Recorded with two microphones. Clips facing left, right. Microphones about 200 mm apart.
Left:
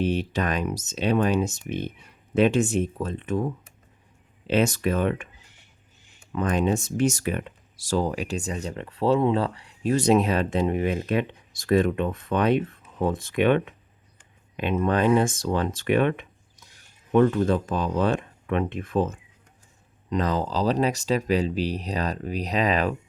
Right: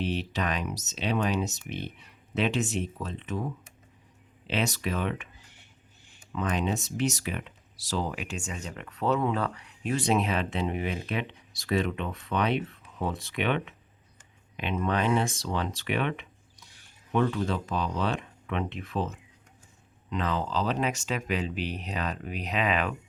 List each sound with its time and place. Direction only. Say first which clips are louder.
0.0 s speech: left 5 dB; 45° left (ahead or behind)
4.4 s speech: left 7 dB; 45° left (ahead or behind)
6.3 s speech: left 6 dB; 50° left (ahead or behind)